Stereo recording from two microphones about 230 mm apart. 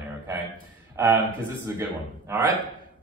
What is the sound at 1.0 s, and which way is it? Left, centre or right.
A man's voice, centre.